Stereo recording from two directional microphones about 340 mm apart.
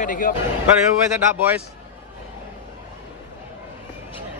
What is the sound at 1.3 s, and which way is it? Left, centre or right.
Speech, centre.